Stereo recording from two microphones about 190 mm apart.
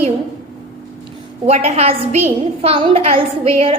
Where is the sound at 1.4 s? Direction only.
35° right (ahead or behind).